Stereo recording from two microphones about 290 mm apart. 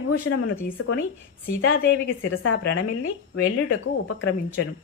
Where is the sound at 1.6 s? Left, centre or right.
Left.